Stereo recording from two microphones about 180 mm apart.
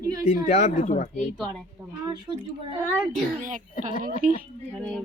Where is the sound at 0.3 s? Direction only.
40° left (ahead or behind).